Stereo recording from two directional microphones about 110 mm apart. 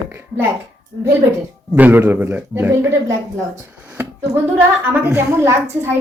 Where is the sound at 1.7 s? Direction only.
15° right (ahead or behind).